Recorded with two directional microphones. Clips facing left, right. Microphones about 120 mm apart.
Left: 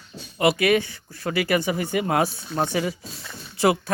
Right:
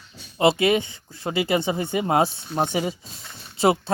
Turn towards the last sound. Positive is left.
turn(degrees=-25)  # may be behind; listen again after turning